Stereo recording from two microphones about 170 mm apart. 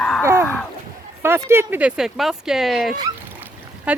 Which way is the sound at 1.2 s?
15° right (ahead or behind).